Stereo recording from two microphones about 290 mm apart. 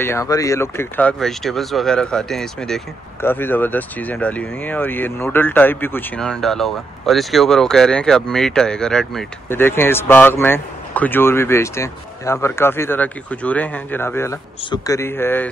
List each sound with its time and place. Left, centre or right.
0.0 s speech: centre